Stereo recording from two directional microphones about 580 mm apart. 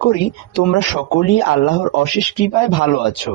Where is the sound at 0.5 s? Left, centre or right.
Left.